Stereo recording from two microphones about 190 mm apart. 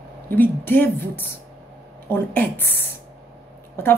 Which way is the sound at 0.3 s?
10° left (ahead or behind).